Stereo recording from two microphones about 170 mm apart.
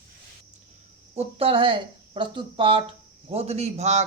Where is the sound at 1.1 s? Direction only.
35° right (ahead or behind).